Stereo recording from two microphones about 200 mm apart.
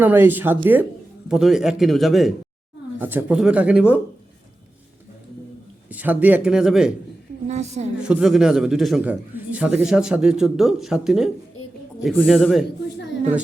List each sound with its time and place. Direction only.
0.0 s a man's voice: 10° right (ahead or behind)
5.9 s speech: 10° right (ahead or behind)
7.4 s a woman's voice: 35° right (ahead or behind)
8.0 s a man's voice: 5° right (ahead or behind)